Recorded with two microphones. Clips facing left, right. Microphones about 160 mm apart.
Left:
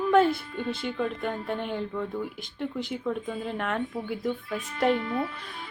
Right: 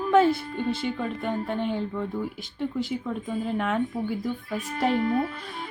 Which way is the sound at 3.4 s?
Centre (ahead or behind).